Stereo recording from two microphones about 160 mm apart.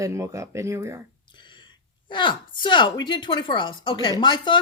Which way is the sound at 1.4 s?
30° left (ahead or behind).